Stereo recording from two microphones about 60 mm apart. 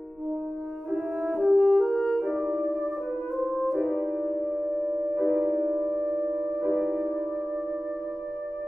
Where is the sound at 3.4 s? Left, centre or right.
Left.